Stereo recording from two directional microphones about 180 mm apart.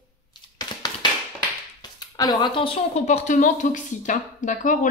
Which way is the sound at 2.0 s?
25° left (ahead or behind).